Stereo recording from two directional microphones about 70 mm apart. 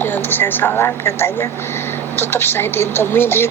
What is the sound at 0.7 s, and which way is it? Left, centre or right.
Speech, left.